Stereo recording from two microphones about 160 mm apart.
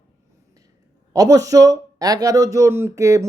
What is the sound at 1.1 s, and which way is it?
Speech, 20° right (ahead or behind).